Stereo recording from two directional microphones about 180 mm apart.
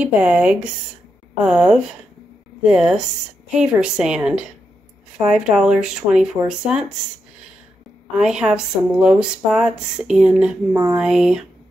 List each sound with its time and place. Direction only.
0.0 s speech: 5° right (ahead or behind)
8.2 s speech: 5° right (ahead or behind)
10.7 s speech: 20° right (ahead or behind)
11.0 s speech: 5° right (ahead or behind)